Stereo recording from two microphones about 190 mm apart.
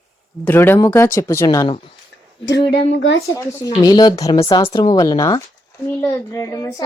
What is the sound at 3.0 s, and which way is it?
Speech, 90° left.